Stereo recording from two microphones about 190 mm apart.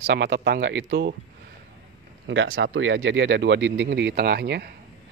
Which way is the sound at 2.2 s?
75° right (ahead or behind).